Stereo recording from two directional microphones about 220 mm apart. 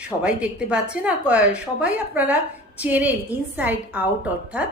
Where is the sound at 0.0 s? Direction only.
5° right (ahead or behind).